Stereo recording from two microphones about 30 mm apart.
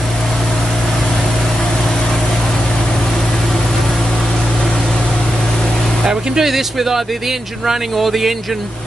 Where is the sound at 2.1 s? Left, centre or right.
Centre.